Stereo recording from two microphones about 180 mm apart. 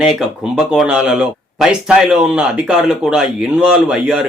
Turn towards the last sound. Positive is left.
turn(degrees=-5)  # may be behind; listen again after turning